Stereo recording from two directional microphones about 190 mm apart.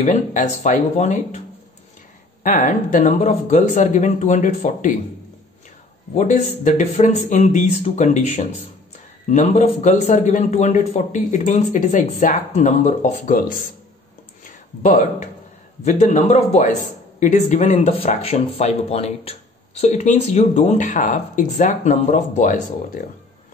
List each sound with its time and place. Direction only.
0.0 s speech: 40° left (ahead or behind)
2.4 s speech: 40° left (ahead or behind)
6.1 s speech: 40° left (ahead or behind)
14.8 s speech: 40° left (ahead or behind)